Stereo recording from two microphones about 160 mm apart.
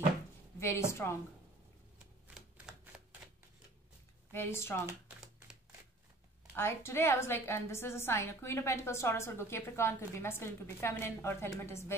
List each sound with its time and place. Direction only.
0.6 s a woman's voice: 15° left (ahead or behind)
2.3 s typewriter: 5° right (ahead or behind)
4.3 s a woman's voice: 15° left (ahead or behind)
6.5 s a woman's voice: 15° left (ahead or behind)